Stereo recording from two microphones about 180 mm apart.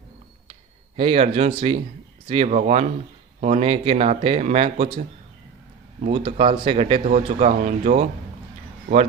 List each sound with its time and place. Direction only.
0.9 s speech: 35° right (ahead or behind)
6.0 s speech: 35° right (ahead or behind)